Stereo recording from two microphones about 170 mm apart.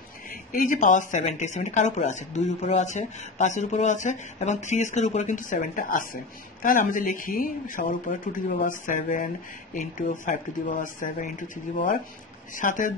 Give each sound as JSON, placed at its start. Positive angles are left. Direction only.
{"t": 0.5, "sound": "speech", "side_deg": 50}